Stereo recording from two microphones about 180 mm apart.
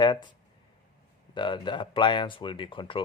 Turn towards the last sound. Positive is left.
turn(degrees=30)  # may be behind; listen again after turning